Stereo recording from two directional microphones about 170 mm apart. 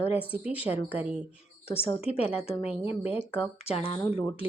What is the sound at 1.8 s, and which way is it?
A woman's voice, 35° left (ahead or behind).